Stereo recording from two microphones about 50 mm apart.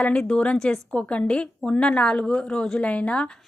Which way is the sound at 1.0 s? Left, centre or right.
Left.